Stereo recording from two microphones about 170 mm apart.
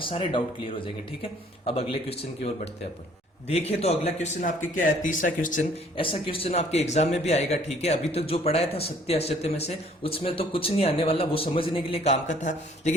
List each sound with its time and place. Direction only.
0.0 s speech: 30° left (ahead or behind); by 5.6 s 50° left (ahead or behind)
6.0 s speech: 30° left (ahead or behind)